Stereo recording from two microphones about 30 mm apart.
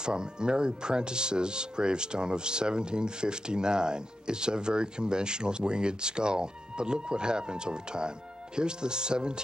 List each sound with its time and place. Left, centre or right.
0.0 s speech: right